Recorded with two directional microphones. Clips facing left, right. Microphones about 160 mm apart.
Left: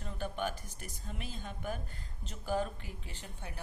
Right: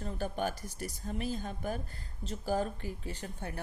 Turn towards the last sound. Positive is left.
turn(degrees=-45)  # may be behind; listen again after turning